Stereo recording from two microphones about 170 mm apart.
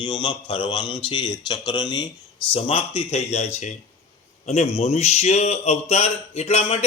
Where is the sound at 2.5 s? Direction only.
35° left (ahead or behind).